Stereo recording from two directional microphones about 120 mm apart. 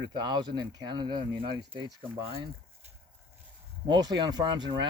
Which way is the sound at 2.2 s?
55° right (ahead or behind).